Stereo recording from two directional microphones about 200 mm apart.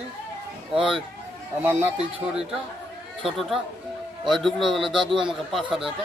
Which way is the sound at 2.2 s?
5° right (ahead or behind).